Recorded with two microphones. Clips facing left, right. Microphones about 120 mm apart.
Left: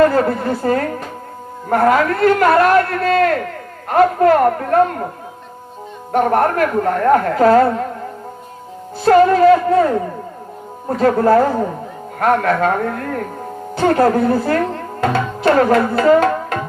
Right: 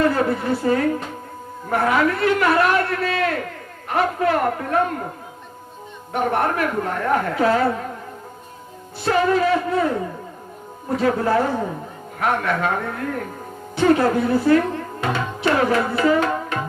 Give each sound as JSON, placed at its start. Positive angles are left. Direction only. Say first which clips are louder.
{"t": 0.0, "sound": "a man's voice", "louder": "left 5 dB", "side_deg": 45}
{"t": 6.1, "sound": "a man's voice", "louder": "left 6 dB", "side_deg": 45}
{"t": 9.0, "sound": "a man's voice", "louder": "left 8 dB", "side_deg": 45}
{"t": 10.8, "sound": "a man's voice", "louder": "left 6 dB", "side_deg": 45}
{"t": 15.4, "sound": "tabla", "louder": "left 6 dB", "side_deg": 45}